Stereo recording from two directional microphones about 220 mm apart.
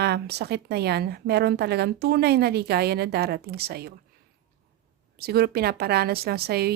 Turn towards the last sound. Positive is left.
turn(degrees=-45)  # may be behind; listen again after turning